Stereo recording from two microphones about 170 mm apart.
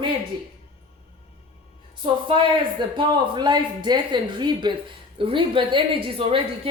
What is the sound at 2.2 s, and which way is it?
A woman's voice, 30° right (ahead or behind).